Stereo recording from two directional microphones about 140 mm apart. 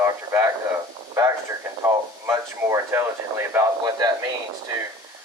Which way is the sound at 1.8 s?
20° right (ahead or behind).